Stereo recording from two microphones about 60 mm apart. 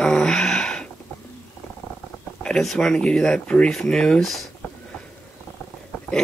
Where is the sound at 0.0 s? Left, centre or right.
Centre.